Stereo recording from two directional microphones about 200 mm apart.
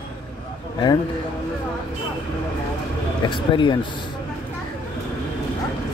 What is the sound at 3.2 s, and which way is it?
Speech, 25° left (ahead or behind).